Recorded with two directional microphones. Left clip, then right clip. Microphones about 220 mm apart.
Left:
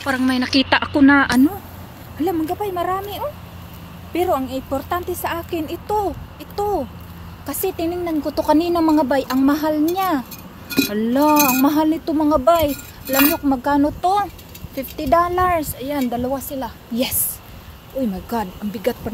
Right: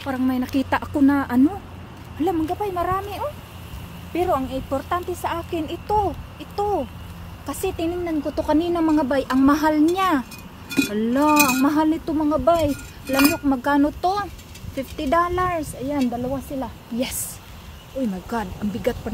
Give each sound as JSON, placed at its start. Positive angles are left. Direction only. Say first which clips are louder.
{"t": 0.1, "sound": "a woman's voice", "louder": "left 5 dB", "side_deg": -5}
{"t": 10.7, "sound": "speech", "louder": "left 2 dB", "side_deg": 5}
{"t": 13.5, "sound": "a woman's voice", "louder": "left 2 dB", "side_deg": 0}
{"t": 16.0, "sound": "a woman's voice", "louder": "left 4 dB", "side_deg": 25}
{"t": 18.3, "sound": "speech", "louder": "left 3 dB", "side_deg": 10}